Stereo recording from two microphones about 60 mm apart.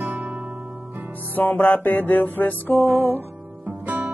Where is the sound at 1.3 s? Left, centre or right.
Left.